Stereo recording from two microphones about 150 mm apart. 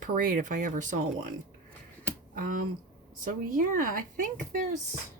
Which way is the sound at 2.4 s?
70° right (ahead or behind).